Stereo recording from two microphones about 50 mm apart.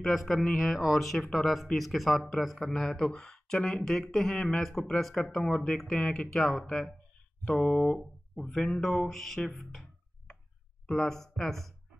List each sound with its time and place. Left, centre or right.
0.0 s music: centre
0.6 s speech: centre
6.3 s music: centre
7.4 s speech: centre
9.1 s music: centre
10.9 s speech: centre